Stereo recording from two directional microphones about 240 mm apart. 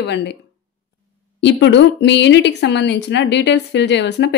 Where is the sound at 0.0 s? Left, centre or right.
Left.